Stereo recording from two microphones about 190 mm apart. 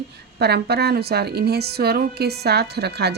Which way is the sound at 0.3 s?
60° right (ahead or behind).